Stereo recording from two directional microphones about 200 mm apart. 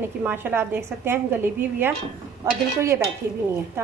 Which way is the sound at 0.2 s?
10° right (ahead or behind).